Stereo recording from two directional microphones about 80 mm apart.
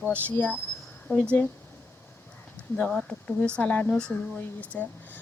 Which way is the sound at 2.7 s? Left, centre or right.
Centre.